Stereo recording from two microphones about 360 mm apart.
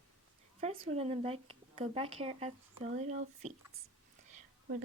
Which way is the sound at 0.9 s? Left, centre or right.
Centre.